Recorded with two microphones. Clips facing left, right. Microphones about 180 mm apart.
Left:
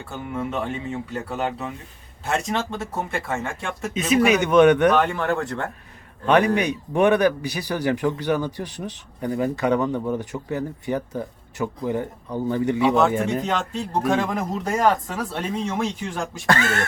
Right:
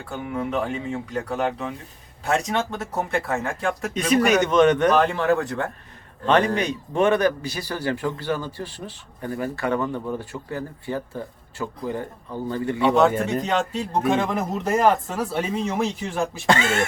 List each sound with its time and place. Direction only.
0.1 s speech: centre (ahead or behind)
4.9 s speech: centre (ahead or behind)
6.2 s a man's voice: 10° left (ahead or behind)
13.0 s speech: 5° left (ahead or behind)
16.5 s speech: 25° right (ahead or behind)